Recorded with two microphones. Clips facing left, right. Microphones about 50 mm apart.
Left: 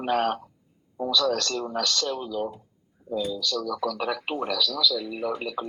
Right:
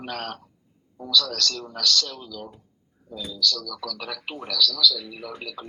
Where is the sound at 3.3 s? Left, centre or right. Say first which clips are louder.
Even; left.